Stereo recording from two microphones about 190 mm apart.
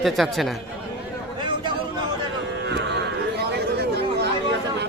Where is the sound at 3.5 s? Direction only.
60° right (ahead or behind).